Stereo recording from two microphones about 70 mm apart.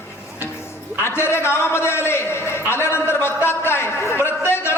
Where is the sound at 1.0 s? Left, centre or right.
Left.